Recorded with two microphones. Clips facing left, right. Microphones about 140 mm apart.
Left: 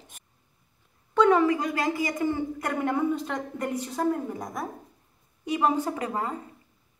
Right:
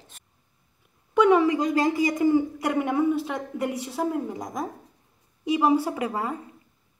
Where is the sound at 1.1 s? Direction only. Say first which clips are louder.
Right 2 dB; 15° right (ahead or behind).